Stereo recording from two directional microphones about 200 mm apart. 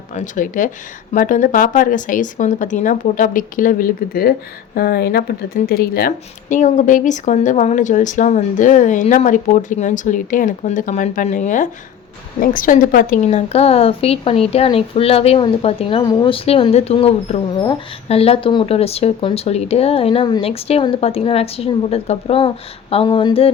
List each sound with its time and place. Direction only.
0.1 s speech: 40° left (ahead or behind)